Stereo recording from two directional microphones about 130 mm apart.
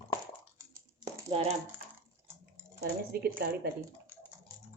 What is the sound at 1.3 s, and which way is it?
Speech, 50° right (ahead or behind).